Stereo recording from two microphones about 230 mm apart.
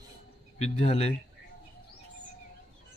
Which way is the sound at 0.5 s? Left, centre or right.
Left.